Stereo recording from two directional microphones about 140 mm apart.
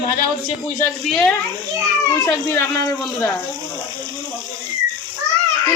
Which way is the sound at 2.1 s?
20° left (ahead or behind).